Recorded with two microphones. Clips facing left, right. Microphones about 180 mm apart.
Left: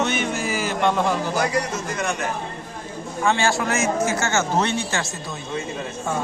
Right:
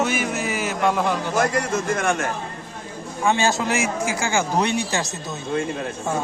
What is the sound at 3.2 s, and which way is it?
A man's voice, 20° right (ahead or behind).